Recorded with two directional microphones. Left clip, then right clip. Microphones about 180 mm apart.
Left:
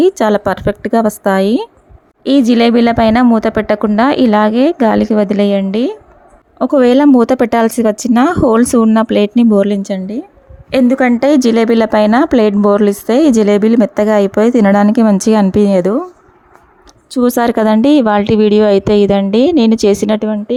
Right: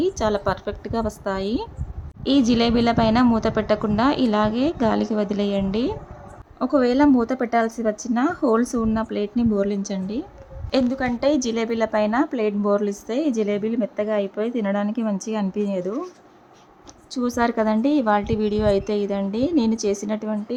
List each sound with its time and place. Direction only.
0.0 s a woman's voice: 45° left (ahead or behind)
17.1 s a woman's voice: 50° left (ahead or behind)